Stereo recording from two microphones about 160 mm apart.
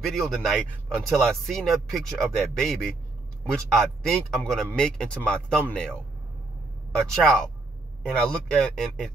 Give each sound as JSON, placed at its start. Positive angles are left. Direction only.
{"t": 0.0, "sound": "speech", "side_deg": 0}
{"t": 7.0, "sound": "speech", "side_deg": 5}